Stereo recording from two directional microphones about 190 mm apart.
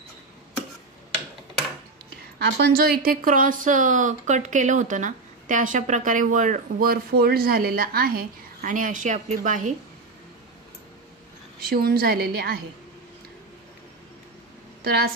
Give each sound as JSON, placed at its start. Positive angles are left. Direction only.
{"t": 2.3, "sound": "a woman's voice", "side_deg": -65}
{"t": 11.6, "sound": "a woman's voice", "side_deg": -55}
{"t": 14.8, "sound": "a woman's voice", "side_deg": -55}